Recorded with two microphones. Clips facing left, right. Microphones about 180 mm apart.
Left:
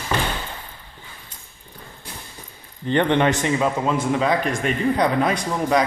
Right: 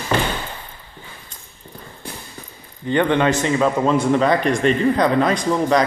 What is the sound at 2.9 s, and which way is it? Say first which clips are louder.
Speech: right 1 dB; 25° left (ahead or behind).